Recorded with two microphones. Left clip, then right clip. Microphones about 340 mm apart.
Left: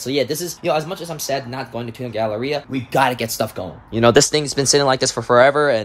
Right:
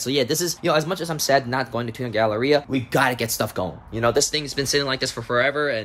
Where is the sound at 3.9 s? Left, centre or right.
Left.